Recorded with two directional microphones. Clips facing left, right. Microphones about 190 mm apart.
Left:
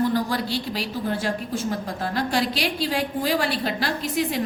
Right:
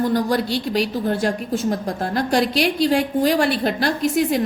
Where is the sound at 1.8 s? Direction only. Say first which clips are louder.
Right 4 dB; 45° right (ahead or behind).